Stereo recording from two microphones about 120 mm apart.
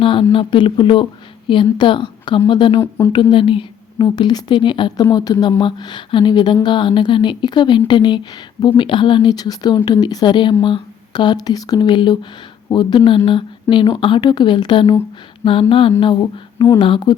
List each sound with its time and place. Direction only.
0.0 s a woman's voice: 45° left (ahead or behind)
16.7 s a woman's voice: 45° left (ahead or behind)